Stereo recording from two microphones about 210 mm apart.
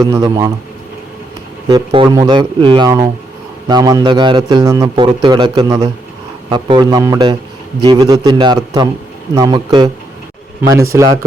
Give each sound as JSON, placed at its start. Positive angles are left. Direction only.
{"t": 0.0, "sound": "a man's voice", "side_deg": -15}
{"t": 1.7, "sound": "a man's voice", "side_deg": -20}
{"t": 10.9, "sound": "a man's voice", "side_deg": -15}